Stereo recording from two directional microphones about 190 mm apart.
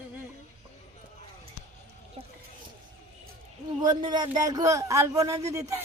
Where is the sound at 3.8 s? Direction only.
20° right (ahead or behind).